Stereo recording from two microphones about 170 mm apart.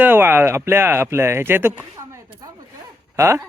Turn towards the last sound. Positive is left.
turn(degrees=-15)  # may be behind; listen again after turning